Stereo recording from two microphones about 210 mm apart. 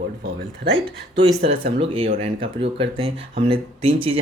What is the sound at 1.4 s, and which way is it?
Speech, 25° right (ahead or behind).